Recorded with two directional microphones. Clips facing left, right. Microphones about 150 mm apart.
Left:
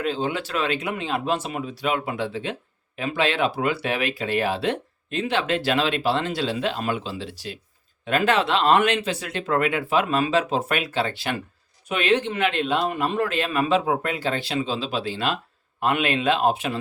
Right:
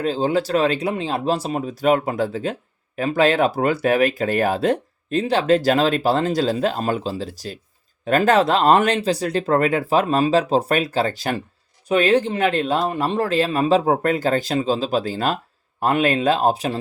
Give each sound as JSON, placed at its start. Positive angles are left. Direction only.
{"t": 0.0, "sound": "speech", "side_deg": -35}